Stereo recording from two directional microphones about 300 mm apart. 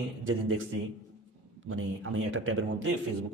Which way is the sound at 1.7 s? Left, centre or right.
Right.